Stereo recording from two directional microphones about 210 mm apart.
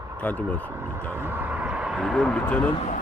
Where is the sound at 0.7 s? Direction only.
10° right (ahead or behind); by 2.6 s 5° left (ahead or behind).